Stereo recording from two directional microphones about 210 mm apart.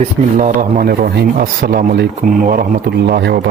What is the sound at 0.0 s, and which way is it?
Speech, 35° right (ahead or behind).